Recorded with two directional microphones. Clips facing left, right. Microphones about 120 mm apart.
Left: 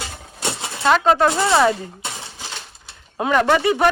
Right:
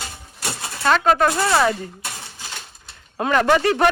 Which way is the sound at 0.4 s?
25° left (ahead or behind).